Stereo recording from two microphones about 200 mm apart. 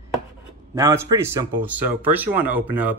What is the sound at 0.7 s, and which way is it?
Speech, 15° right (ahead or behind).